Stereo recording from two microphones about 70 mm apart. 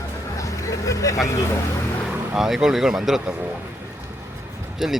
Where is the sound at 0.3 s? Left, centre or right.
Left.